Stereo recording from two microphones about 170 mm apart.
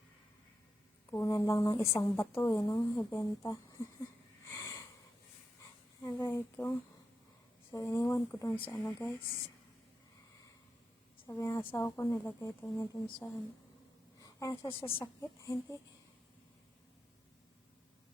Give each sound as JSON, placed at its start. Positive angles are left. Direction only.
{"t": 1.1, "sound": "speech", "side_deg": 20}
{"t": 4.4, "sound": "a sound", "side_deg": 20}
{"t": 6.0, "sound": "speech", "side_deg": 20}
{"t": 11.3, "sound": "speech", "side_deg": 15}
{"t": 14.2, "sound": "a sound", "side_deg": 20}
{"t": 14.8, "sound": "speech", "side_deg": 15}